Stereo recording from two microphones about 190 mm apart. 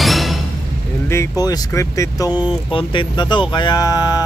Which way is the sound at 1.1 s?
15° left (ahead or behind).